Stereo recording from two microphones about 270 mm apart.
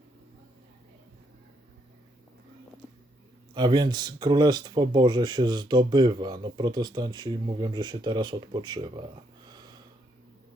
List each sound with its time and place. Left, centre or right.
3.5 s speech: centre
9.5 s snort: centre